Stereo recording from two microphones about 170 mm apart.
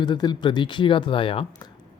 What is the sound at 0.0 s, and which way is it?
Speech, 25° left (ahead or behind).